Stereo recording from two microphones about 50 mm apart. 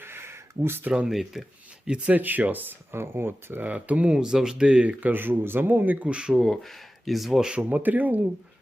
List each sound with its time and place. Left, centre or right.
0.0 s a sound: right
1.0 s speech: centre
2.0 s speech: right
2.9 s speech: right
3.6 s speech: right
4.9 s speech: right
6.1 s speech: right
6.4 s speech: centre
7.5 s speech: right